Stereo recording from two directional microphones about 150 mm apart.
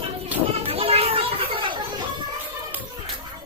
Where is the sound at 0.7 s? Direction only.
40° right (ahead or behind).